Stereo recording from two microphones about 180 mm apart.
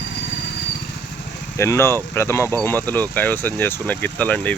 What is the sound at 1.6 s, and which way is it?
Speech, 15° left (ahead or behind).